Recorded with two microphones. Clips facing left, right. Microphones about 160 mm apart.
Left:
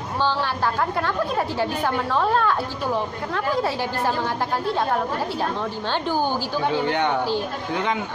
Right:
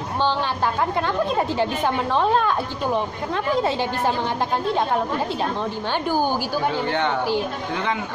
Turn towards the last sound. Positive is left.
turn(degrees=15)  # may be behind; listen again after turning